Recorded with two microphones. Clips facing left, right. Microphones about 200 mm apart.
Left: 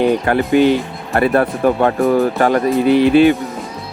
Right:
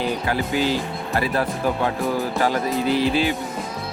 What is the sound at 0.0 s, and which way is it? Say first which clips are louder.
Speech: left 9 dB; 60° left (ahead or behind).